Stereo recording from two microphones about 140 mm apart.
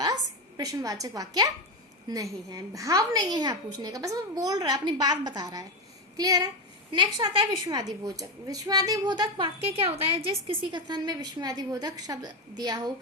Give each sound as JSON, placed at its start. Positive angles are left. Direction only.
{"t": 0.0, "sound": "a woman's voice", "side_deg": -30}
{"t": 9.6, "sound": "a woman's voice", "side_deg": -45}